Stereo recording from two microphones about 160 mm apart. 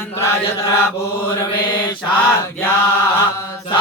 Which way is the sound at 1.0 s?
15° left (ahead or behind).